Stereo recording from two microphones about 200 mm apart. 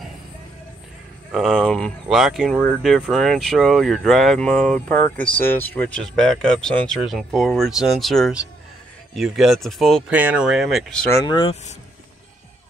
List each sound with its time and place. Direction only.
1.3 s speech: centre (ahead or behind)
11.1 s speech: 20° left (ahead or behind)